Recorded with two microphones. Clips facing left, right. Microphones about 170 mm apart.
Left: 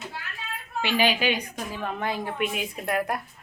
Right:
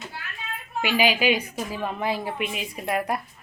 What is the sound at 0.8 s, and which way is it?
A woman's voice, 10° right (ahead or behind).